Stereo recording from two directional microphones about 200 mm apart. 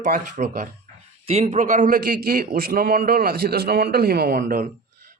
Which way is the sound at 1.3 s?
30° right (ahead or behind).